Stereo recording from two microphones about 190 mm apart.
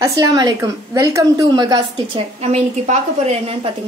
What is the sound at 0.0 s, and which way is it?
A woman's voice, 20° right (ahead or behind).